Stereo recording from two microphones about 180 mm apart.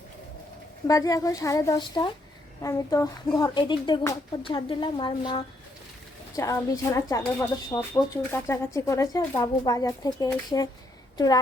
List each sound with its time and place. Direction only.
0.9 s speech: 20° left (ahead or behind)